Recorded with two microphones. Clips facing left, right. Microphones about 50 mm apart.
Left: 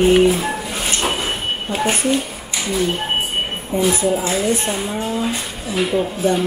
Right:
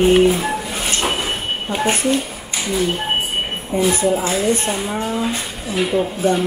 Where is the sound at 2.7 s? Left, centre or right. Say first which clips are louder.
Even; centre.